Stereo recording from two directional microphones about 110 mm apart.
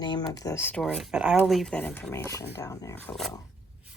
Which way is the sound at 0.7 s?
5° left (ahead or behind).